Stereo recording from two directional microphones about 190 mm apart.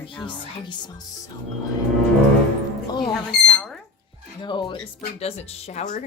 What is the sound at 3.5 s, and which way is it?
Speech, 5° left (ahead or behind).